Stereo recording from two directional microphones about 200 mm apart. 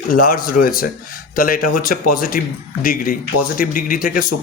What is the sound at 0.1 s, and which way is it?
A man's voice, 45° left (ahead or behind).